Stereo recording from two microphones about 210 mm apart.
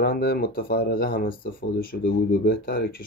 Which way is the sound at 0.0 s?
45° left (ahead or behind).